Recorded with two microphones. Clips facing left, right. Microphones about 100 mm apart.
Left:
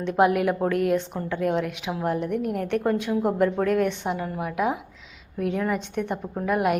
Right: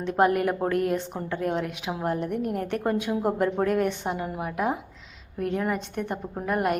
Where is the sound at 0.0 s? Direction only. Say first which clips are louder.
Left 2 dB; centre (ahead or behind).